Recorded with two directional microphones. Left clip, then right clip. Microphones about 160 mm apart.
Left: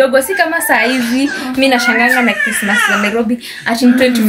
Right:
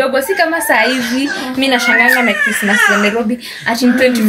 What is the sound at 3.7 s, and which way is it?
Speech, 25° left (ahead or behind).